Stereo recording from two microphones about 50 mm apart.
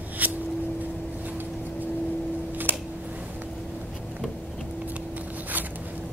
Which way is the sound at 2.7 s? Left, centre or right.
Right.